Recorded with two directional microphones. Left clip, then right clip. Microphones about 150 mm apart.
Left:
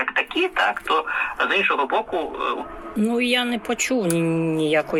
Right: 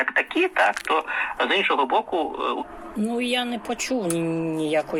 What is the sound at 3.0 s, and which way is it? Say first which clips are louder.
Speech: left 4 dB; 5° left (ahead or behind).